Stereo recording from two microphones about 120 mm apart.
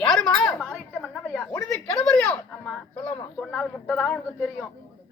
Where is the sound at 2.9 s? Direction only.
10° left (ahead or behind).